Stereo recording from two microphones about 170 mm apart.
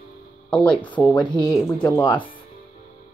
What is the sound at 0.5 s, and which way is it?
Speech, 5° left (ahead or behind).